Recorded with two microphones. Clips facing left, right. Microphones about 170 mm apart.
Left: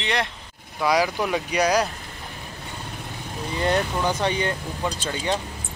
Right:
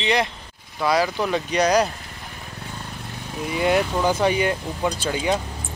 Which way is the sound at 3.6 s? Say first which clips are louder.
Right 3 dB; 15° right (ahead or behind).